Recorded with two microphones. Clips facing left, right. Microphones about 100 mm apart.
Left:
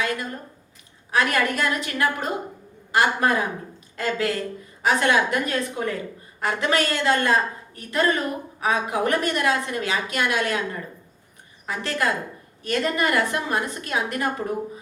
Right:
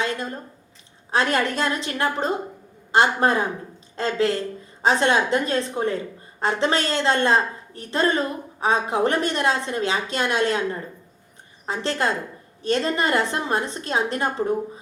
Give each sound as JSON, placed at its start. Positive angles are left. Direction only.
{"t": 0.0, "sound": "a woman's voice", "side_deg": -30}